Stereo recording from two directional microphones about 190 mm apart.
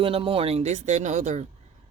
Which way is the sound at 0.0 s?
30° right (ahead or behind).